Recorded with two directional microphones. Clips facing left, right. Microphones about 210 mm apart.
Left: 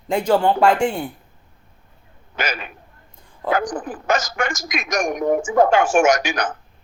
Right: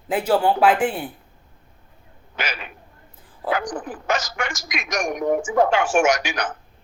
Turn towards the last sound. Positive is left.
turn(degrees=45)  # may be behind; listen again after turning